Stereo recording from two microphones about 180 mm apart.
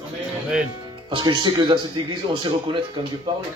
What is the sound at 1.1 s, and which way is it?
Speech, 25° right (ahead or behind).